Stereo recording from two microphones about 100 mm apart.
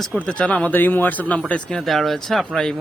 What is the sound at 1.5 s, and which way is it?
Speech, 5° left (ahead or behind).